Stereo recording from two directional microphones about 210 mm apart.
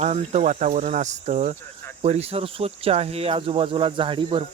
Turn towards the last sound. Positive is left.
turn(degrees=-25)  # may be behind; listen again after turning